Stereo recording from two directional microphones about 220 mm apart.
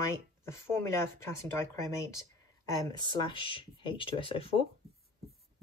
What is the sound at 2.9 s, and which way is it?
Speech, 20° left (ahead or behind).